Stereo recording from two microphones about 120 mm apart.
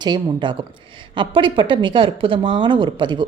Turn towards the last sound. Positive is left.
turn(degrees=-40)  # may be behind; listen again after turning